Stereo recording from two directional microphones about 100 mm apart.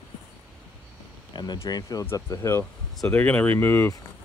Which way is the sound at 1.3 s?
45° left (ahead or behind).